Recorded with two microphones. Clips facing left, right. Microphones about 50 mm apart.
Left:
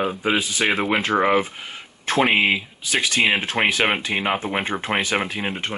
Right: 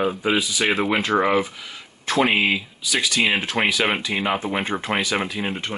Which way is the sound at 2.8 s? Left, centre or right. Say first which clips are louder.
Left 1 dB; left.